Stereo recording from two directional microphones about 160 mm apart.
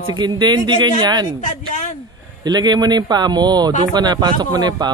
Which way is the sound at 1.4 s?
50° left (ahead or behind).